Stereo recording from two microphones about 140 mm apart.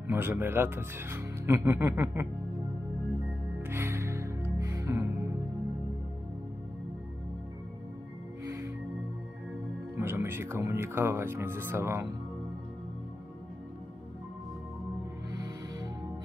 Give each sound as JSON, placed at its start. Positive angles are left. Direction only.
{"t": 0.1, "sound": "speech", "side_deg": -15}
{"t": 3.6, "sound": "music", "side_deg": -20}
{"t": 8.5, "sound": "music", "side_deg": -20}
{"t": 9.9, "sound": "speech", "side_deg": -15}
{"t": 15.3, "sound": "music", "side_deg": -25}